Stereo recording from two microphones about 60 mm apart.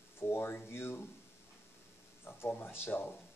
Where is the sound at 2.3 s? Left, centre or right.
Left.